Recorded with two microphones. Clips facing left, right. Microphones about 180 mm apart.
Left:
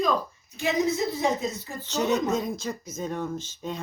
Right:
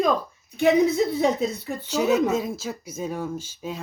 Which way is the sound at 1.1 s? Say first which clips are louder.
Right 4 dB; 60° right (ahead or behind).